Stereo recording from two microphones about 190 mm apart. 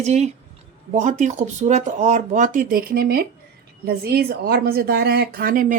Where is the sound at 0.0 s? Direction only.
35° right (ahead or behind).